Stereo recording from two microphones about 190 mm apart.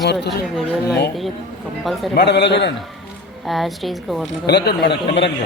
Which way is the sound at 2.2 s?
65° left (ahead or behind).